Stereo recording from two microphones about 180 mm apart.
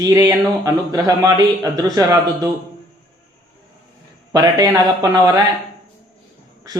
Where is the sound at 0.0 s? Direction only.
20° right (ahead or behind).